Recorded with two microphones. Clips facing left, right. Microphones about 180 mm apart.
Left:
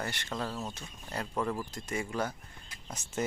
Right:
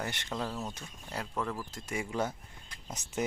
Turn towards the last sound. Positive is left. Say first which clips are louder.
# even
turn(degrees=-20)  # may be behind; listen again after turning